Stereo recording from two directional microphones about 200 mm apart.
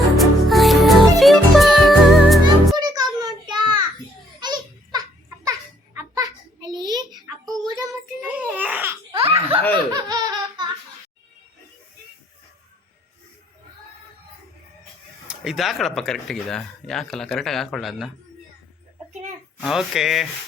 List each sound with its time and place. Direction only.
0.2 s music: centre (ahead or behind)
2.7 s a sound: 20° right (ahead or behind)
4.4 s baby laughter: 20° right (ahead or behind)
5.5 s a sound: 15° right (ahead or behind)
7.8 s child singing: 10° right (ahead or behind)
9.1 s belly laugh: 30° right (ahead or behind)
9.9 s laughter: 20° right (ahead or behind)
15.3 s speech: centre (ahead or behind)
19.6 s speech: centre (ahead or behind)